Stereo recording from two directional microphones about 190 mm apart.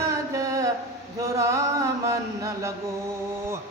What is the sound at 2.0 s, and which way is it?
Chant, 15° right (ahead or behind).